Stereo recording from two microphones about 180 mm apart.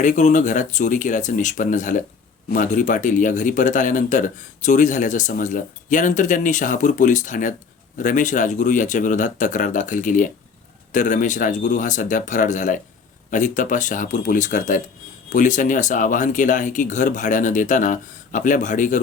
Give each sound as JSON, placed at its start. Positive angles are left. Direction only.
{"t": 0.0, "sound": "speech", "side_deg": 45}